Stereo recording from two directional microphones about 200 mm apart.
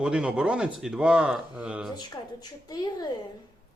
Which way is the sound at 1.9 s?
20° left (ahead or behind).